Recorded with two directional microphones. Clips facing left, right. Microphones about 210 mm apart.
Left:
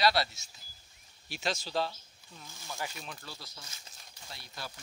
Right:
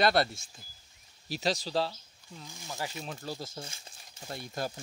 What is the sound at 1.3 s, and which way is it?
Speech, 35° right (ahead or behind).